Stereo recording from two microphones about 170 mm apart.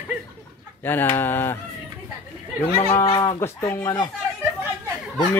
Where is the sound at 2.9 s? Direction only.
20° left (ahead or behind).